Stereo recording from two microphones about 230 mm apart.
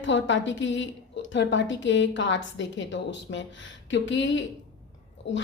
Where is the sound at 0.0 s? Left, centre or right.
Left.